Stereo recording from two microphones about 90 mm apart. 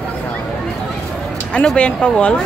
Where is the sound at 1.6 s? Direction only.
10° left (ahead or behind).